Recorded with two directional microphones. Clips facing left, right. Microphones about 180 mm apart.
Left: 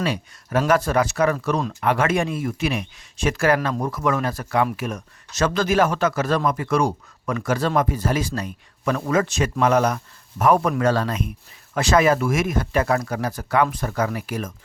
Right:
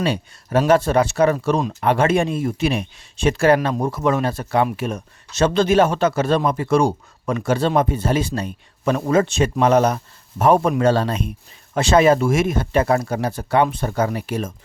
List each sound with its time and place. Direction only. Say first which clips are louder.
0.0 s speech: right 3 dB; 30° right (ahead or behind)